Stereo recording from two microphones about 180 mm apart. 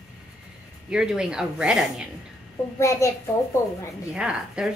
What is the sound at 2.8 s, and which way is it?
Speech, 15° left (ahead or behind).